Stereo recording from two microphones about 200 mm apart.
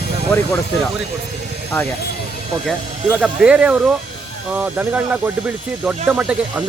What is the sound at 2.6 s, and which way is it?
Speech, centre (ahead or behind).